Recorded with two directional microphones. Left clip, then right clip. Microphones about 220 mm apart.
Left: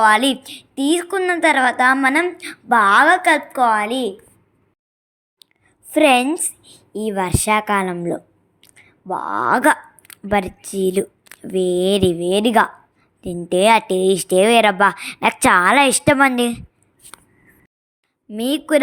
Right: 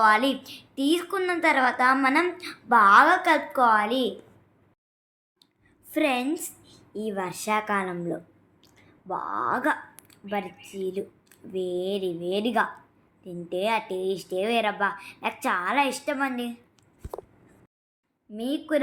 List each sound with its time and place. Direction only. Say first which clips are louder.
0.0 s a woman's voice: left 7 dB; 40° left (ahead or behind)
5.4 s a sound: left 11 dB; 40° left (ahead or behind)
5.9 s a woman's voice: left 11 dB; 40° left (ahead or behind)
18.3 s a woman's voice: left 10 dB; 50° left (ahead or behind)